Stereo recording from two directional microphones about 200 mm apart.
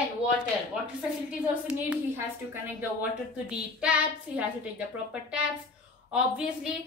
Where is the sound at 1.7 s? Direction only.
10° right (ahead or behind).